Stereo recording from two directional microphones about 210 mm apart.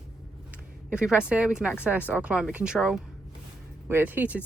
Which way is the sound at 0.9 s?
5° right (ahead or behind).